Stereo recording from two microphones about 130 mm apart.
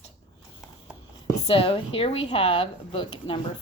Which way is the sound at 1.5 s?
45° left (ahead or behind).